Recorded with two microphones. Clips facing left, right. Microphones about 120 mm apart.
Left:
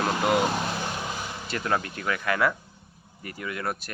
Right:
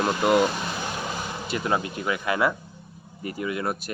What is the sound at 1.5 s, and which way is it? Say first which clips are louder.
Speech: right 2 dB; 15° right (ahead or behind).